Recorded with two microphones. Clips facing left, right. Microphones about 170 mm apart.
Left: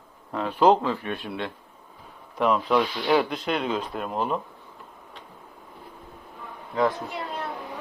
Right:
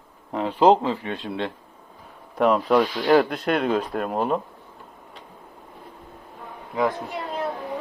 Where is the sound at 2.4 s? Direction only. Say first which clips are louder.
Right 3 dB; 45° right (ahead or behind).